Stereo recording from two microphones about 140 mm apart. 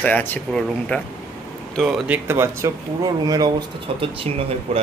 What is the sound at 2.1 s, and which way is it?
Speech, 20° right (ahead or behind).